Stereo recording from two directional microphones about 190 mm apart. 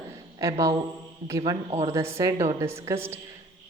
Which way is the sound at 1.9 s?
15° right (ahead or behind).